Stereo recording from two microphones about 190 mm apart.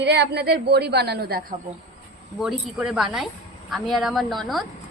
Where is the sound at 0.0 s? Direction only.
60° right (ahead or behind).